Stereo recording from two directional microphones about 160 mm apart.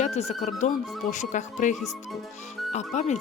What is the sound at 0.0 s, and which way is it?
Speech, 40° left (ahead or behind).